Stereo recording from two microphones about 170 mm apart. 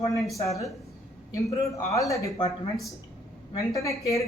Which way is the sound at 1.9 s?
20° left (ahead or behind).